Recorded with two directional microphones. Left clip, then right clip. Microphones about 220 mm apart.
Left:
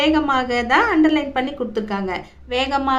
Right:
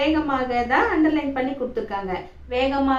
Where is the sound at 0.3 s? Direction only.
50° left (ahead or behind).